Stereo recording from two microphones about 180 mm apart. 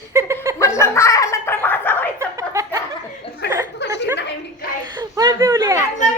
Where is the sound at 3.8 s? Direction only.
75° left (ahead or behind).